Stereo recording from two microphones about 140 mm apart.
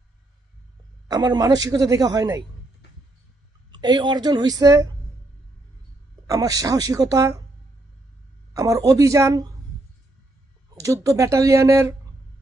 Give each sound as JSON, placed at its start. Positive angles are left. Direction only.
{"t": 1.0, "sound": "a man's voice", "side_deg": -25}
{"t": 3.7, "sound": "a woman's voice", "side_deg": -30}
{"t": 6.2, "sound": "a man's voice", "side_deg": -25}
{"t": 8.5, "sound": "a man's voice", "side_deg": -25}
{"t": 10.8, "sound": "a man's voice", "side_deg": -25}